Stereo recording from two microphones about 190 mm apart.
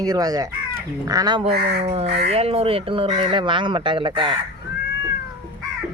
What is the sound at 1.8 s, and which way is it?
Speech, 30° right (ahead or behind).